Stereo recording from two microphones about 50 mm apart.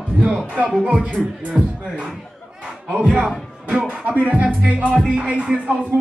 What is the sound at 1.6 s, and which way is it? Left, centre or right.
Speech, centre.